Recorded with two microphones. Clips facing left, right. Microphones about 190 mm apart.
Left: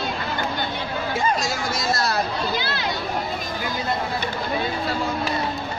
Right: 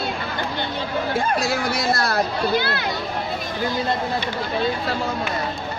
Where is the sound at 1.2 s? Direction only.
60° right (ahead or behind).